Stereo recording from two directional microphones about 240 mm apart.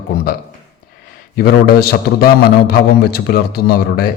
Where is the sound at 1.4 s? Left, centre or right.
Left.